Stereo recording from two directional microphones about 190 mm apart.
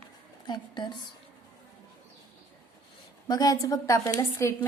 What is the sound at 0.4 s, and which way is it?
Speech, 20° left (ahead or behind).